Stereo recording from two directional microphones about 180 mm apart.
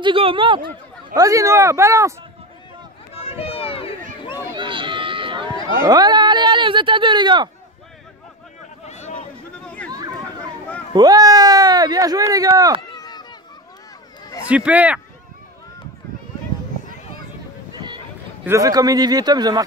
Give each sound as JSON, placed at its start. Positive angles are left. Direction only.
{"t": 0.0, "sound": "speech", "side_deg": -30}
{"t": 1.1, "sound": "speech", "side_deg": -20}
{"t": 3.3, "sound": "run", "side_deg": 35}
{"t": 4.6, "sound": "speech", "side_deg": -25}
{"t": 8.8, "sound": "a sound", "side_deg": 40}
{"t": 9.8, "sound": "chatter", "side_deg": -20}
{"t": 10.9, "sound": "speech", "side_deg": -20}
{"t": 12.9, "sound": "a sound", "side_deg": 20}
{"t": 14.4, "sound": "speech", "side_deg": -5}
{"t": 17.7, "sound": "boat", "side_deg": -25}
{"t": 18.4, "sound": "speech", "side_deg": -15}